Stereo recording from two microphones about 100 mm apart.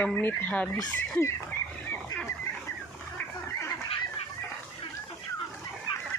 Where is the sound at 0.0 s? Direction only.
20° left (ahead or behind).